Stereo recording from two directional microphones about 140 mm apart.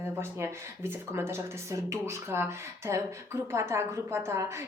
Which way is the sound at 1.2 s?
15° right (ahead or behind).